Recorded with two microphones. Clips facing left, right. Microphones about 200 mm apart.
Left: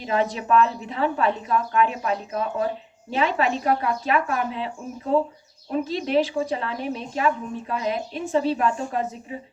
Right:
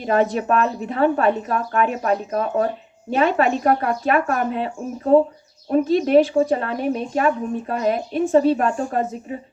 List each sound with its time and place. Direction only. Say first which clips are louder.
0.0 s speech: right 5 dB; 50° right (ahead or behind)